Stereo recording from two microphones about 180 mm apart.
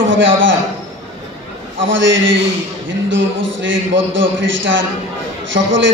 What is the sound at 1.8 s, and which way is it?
A man's voice, 90° right.